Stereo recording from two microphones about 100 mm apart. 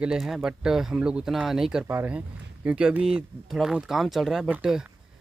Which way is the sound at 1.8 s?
20° right (ahead or behind).